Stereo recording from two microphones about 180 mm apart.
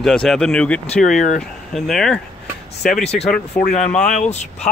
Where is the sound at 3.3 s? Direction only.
45° left (ahead or behind).